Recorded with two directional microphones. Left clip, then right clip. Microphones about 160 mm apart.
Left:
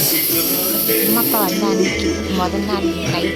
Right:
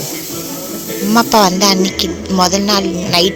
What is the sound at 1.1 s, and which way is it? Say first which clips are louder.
Speech: right 8 dB; 50° right (ahead or behind).